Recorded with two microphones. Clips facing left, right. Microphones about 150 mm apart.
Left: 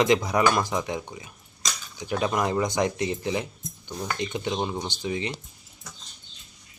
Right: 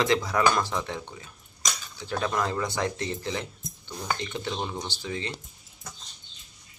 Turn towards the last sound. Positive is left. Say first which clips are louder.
# left 4 dB
turn(degrees=15)  # may be behind; listen again after turning